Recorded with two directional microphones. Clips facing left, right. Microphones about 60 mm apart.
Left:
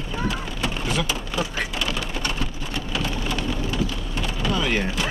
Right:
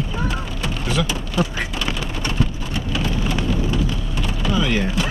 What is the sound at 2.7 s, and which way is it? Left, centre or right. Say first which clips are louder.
Rain: right 3 dB; centre.